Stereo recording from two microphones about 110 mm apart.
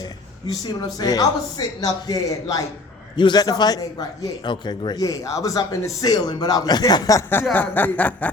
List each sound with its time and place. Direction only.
0.0 s speech: 40° left (ahead or behind)
7.5 s speech: 15° left (ahead or behind)